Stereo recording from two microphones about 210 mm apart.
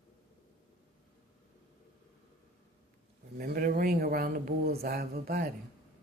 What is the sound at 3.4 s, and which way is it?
Speech, 45° right (ahead or behind).